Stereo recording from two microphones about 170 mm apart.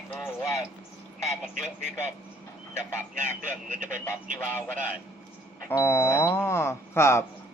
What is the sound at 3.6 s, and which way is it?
Speech, 50° right (ahead or behind).